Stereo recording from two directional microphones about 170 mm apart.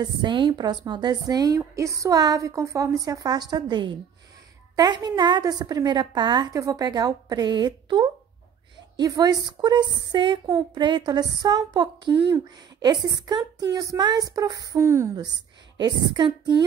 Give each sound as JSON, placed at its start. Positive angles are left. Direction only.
{"t": 0.0, "sound": "a woman's voice", "side_deg": -30}